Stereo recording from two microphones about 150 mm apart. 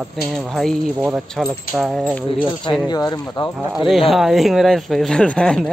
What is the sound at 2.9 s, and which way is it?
Speech, 25° left (ahead or behind).